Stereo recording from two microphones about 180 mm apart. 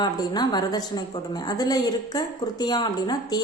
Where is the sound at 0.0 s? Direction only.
25° left (ahead or behind).